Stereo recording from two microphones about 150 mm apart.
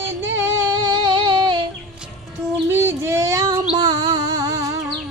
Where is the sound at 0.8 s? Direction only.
30° right (ahead or behind).